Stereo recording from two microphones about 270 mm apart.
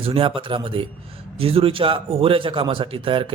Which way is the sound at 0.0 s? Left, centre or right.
Right.